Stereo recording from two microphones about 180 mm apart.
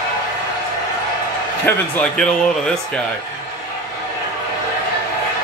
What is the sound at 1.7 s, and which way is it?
A man's voice, 5° left (ahead or behind).